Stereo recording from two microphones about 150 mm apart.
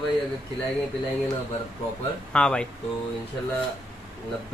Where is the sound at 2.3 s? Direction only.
5° left (ahead or behind).